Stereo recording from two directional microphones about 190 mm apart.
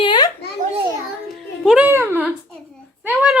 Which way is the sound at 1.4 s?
Centre (ahead or behind).